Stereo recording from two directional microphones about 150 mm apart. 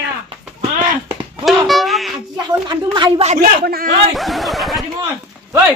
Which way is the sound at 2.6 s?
30° right (ahead or behind).